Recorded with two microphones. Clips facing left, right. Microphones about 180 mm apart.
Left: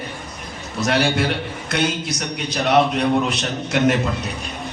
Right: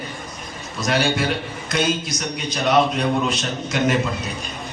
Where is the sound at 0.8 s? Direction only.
65° left (ahead or behind).